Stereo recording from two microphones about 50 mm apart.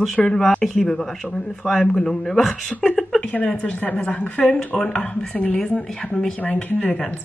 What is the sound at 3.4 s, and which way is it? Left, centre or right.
A woman's voice, left.